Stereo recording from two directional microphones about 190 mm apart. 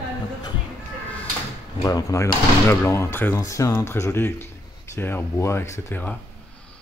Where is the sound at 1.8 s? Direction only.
20° left (ahead or behind).